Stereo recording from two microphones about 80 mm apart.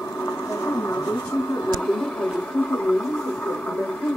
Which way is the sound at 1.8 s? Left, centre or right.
Centre.